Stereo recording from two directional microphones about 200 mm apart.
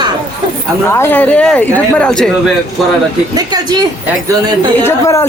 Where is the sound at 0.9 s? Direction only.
10° left (ahead or behind).